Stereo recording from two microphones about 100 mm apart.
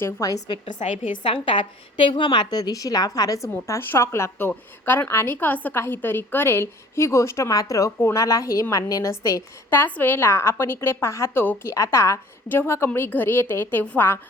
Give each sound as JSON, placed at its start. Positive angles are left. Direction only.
{"t": 0.0, "sound": "a woman's voice", "side_deg": 35}
{"t": 0.8, "sound": "a woman's voice", "side_deg": 90}
{"t": 1.2, "sound": "a woman's voice", "side_deg": 60}
{"t": 9.6, "sound": "a woman's voice", "side_deg": 20}